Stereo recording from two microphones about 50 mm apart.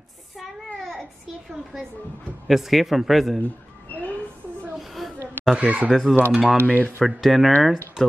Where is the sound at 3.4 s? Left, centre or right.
Left.